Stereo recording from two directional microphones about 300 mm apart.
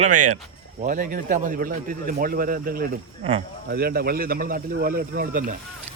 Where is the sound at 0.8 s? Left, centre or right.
Right.